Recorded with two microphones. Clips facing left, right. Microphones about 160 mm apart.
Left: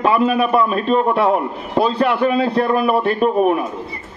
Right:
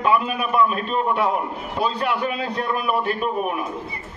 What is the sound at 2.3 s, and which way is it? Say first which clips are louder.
A man's voice: left 9 dB; 35° left (ahead or behind).